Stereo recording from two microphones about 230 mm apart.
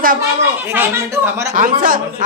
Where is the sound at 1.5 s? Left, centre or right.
Right.